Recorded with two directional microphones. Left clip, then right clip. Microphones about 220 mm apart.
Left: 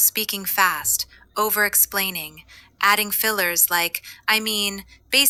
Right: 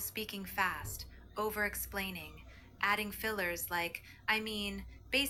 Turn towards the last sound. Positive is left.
turn(degrees=45)  # may be behind; listen again after turning